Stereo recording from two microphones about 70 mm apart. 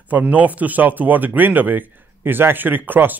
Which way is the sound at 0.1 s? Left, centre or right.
Right.